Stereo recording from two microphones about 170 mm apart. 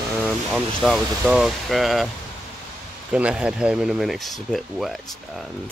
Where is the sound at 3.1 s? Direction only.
5° right (ahead or behind).